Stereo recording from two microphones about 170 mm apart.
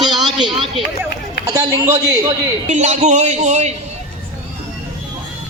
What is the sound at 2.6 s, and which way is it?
A man's voice, 40° right (ahead or behind).